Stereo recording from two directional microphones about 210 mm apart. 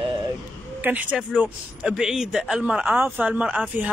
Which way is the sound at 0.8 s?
5° right (ahead or behind).